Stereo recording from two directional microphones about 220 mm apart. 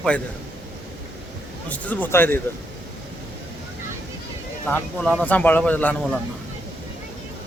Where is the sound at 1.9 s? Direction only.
10° left (ahead or behind).